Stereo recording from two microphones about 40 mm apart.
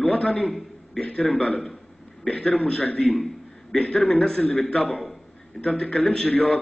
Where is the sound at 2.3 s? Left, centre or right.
Left.